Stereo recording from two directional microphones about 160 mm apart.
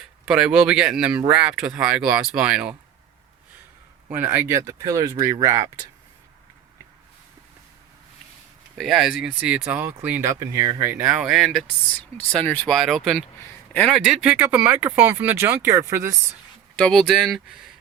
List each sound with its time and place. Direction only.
0.3 s speech: 5° right (ahead or behind)
4.1 s speech: 10° right (ahead or behind)
8.8 s speech: centre (ahead or behind)
10.4 s speech: 25° right (ahead or behind)
10.8 s speech: 10° right (ahead or behind)
16.7 s speech: 5° left (ahead or behind)